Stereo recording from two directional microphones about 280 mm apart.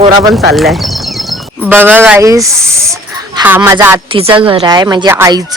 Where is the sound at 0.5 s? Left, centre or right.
Centre.